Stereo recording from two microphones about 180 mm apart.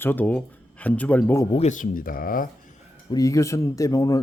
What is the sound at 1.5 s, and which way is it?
Speech, 40° left (ahead or behind).